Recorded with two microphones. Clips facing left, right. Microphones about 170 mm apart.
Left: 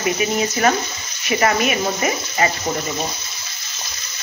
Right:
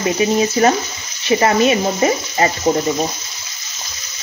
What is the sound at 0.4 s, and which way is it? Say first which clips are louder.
Speech: right 4 dB; 30° right (ahead or behind).